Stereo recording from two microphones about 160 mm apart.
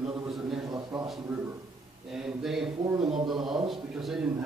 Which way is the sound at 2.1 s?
5° right (ahead or behind).